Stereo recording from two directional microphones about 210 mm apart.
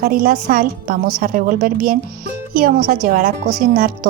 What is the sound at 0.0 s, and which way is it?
A woman's voice, 45° right (ahead or behind).